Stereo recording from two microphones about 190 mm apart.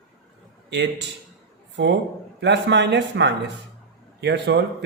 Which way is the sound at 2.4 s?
65° right (ahead or behind).